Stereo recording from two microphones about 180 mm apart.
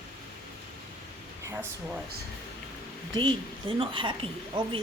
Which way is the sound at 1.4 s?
15° right (ahead or behind).